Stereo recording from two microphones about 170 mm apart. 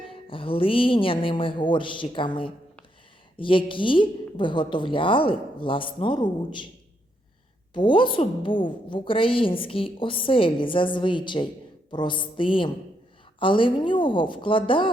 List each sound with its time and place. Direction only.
0.0 s a woman's voice: 30° left (ahead or behind)
7.7 s a woman's voice: 30° left (ahead or behind)